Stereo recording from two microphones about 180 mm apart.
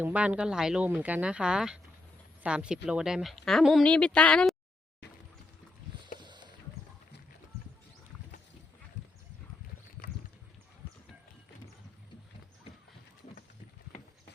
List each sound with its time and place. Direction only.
0.0 s speech: 10° right (ahead or behind)
6.1 s boat: 25° right (ahead or behind)